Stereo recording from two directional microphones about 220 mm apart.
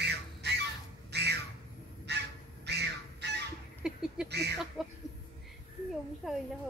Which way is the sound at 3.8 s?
Centre (ahead or behind).